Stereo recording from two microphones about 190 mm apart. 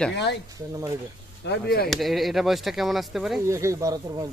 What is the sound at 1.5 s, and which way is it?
Speech, 55° left (ahead or behind).